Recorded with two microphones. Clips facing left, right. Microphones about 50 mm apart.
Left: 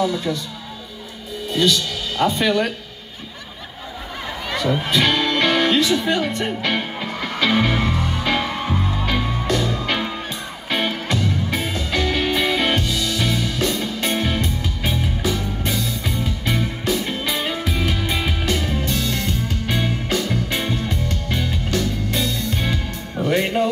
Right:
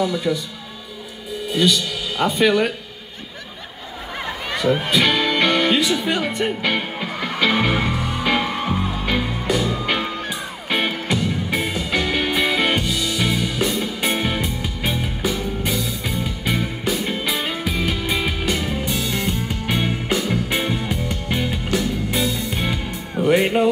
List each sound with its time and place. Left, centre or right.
0.0 s speech: centre
1.5 s speech: centre
4.5 s music: centre